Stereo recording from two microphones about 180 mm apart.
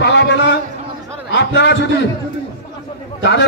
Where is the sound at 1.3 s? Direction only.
70° left (ahead or behind).